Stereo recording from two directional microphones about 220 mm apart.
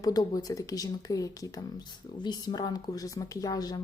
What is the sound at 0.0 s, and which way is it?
Speech, 15° left (ahead or behind).